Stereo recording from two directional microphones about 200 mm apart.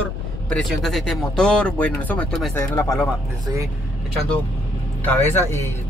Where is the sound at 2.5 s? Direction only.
15° left (ahead or behind).